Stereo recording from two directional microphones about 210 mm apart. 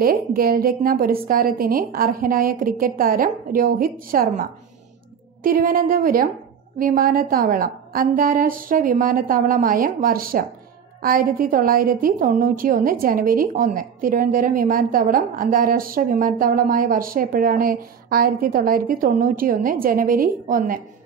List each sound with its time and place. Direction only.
0.0 s a woman's voice: 45° right (ahead or behind)